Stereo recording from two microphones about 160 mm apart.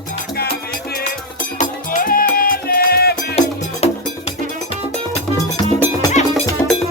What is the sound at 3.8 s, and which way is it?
Music, 40° left (ahead or behind).